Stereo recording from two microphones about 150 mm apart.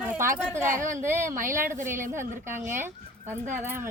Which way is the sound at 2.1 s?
15° right (ahead or behind).